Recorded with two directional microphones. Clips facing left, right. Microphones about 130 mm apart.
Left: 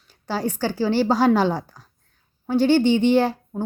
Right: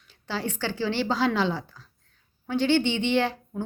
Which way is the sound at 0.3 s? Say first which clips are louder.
Left 6 dB; 40° left (ahead or behind).